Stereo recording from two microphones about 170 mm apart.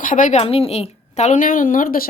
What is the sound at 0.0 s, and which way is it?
A woman's voice, 50° left (ahead or behind).